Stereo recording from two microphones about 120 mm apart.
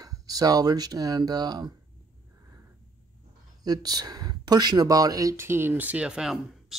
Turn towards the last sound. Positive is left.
turn(degrees=-5)  # may be behind; listen again after turning